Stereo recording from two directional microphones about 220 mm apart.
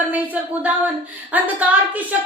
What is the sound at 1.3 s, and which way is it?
Speech, 5° right (ahead or behind).